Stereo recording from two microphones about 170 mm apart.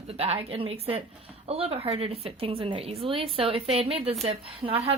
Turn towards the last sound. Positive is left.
turn(degrees=-35)  # may be behind; listen again after turning